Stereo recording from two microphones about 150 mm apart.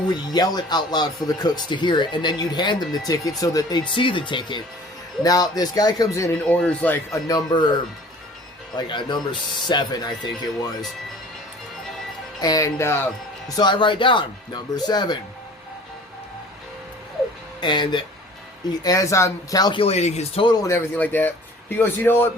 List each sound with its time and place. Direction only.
0.1 s speech: 25° left (ahead or behind)
6.4 s speech: 5° left (ahead or behind)
7.3 s speech: 25° left (ahead or behind)
12.4 s speech: 25° left (ahead or behind)
13.6 s speech: 30° left (ahead or behind)
17.6 s speech: 30° left (ahead or behind)
19.8 s speech: 45° left (ahead or behind)
20.4 s speech: 25° left (ahead or behind)